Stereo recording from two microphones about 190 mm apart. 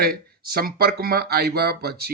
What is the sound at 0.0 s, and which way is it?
A man's voice, 55° right (ahead or behind).